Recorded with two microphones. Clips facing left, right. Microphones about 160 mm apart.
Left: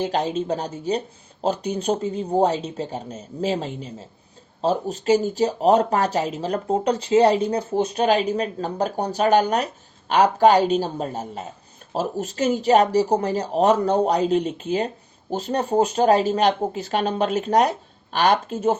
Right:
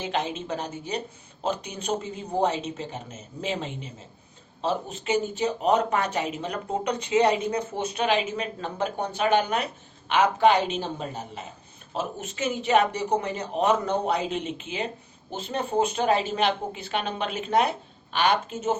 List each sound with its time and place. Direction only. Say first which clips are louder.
0.0 s speech: left 6 dB; 35° left (ahead or behind)